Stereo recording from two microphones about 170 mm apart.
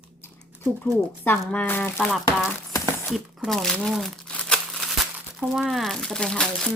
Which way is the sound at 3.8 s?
Centre (ahead or behind).